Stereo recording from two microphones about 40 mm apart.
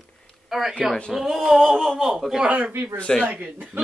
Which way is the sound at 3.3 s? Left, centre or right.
Right.